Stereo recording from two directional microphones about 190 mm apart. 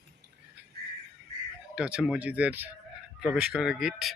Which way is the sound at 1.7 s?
5° right (ahead or behind).